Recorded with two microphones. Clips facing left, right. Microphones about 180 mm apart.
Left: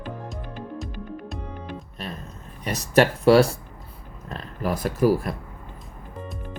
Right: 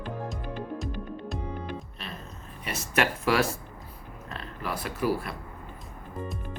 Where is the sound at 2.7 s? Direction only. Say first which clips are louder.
Left 8 dB; 35° left (ahead or behind).